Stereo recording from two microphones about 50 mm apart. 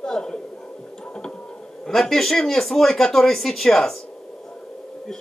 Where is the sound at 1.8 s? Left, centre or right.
Centre.